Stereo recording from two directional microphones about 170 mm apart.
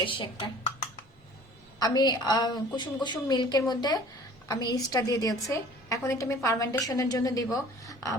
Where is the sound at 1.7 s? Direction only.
25° left (ahead or behind).